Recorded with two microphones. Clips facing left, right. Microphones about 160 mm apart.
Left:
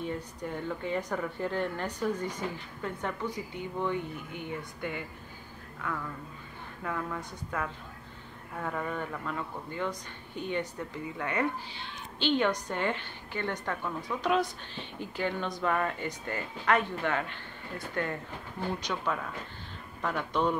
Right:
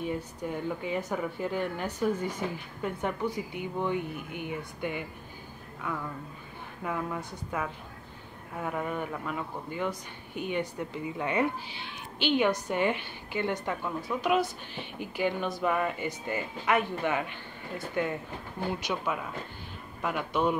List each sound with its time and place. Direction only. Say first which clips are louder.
0.0 s a woman's voice: right 2 dB; 10° right (ahead or behind)
6.8 s a woman's voice: right 2 dB; 15° right (ahead or behind)